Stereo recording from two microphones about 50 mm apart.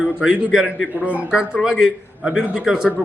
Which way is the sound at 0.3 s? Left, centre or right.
Centre.